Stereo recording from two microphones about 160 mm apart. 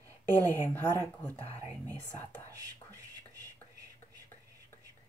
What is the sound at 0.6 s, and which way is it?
Speech, 15° left (ahead or behind).